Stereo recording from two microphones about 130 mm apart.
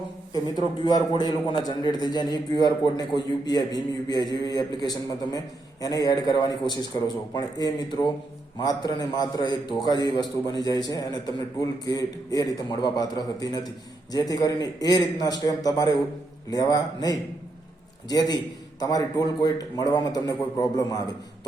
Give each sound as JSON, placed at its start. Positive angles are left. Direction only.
{"t": 0.9, "sound": "a man's voice", "side_deg": 30}